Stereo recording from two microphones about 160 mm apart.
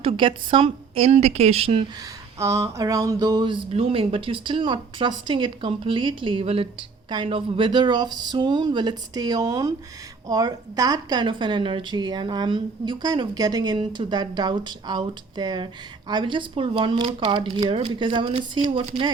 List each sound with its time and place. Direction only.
0.0 s a woman's voice: 35° right (ahead or behind)
2.0 s a woman's voice: 20° right (ahead or behind); by 19.1 s 35° right (ahead or behind)